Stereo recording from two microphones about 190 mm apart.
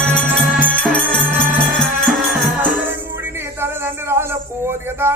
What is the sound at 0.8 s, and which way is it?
Music, 5° left (ahead or behind).